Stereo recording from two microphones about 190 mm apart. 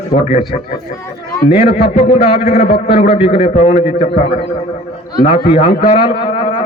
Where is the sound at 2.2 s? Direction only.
30° left (ahead or behind).